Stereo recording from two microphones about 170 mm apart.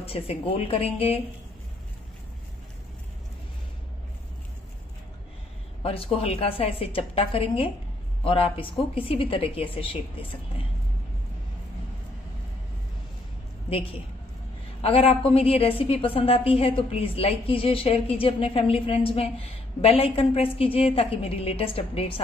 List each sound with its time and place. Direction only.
0.0 s a woman's voice: 35° left (ahead or behind)
5.8 s a woman's voice: 35° left (ahead or behind)
14.8 s a woman's voice: 35° left (ahead or behind)